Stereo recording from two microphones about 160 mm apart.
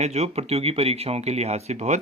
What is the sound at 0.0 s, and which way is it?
A man's voice, 40° right (ahead or behind).